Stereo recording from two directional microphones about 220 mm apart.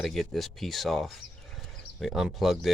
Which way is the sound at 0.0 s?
Centre (ahead or behind).